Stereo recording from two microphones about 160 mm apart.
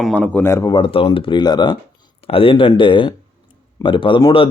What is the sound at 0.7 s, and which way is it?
Speech, 30° left (ahead or behind).